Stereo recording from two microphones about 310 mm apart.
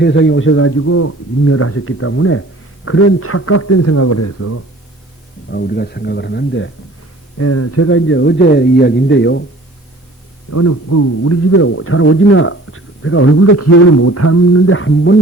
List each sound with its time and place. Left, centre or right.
0.0 s a man's voice: left
5.5 s speech: left
7.3 s speech: left
10.5 s a man's voice: left